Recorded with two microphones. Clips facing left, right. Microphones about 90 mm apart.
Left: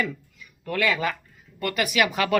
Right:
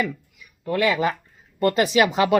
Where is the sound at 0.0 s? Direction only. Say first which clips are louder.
Right 2 dB; 15° right (ahead or behind).